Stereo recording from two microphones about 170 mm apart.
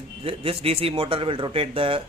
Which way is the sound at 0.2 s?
35° right (ahead or behind).